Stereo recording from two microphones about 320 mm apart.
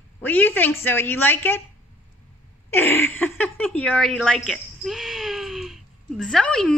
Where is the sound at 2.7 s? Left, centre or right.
Centre.